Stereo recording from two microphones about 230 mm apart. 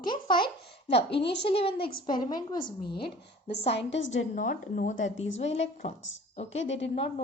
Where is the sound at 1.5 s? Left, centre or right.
Left.